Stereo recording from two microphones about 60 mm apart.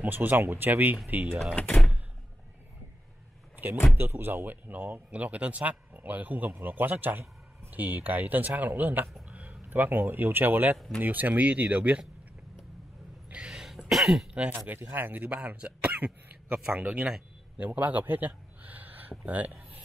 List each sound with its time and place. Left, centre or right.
0.0 s speech: right
1.5 s speech: left
3.9 s speech: right
13.3 s a sound: centre
13.6 s cough: centre
14.8 s speech: right; by 17.2 s centre
17.6 s speech: right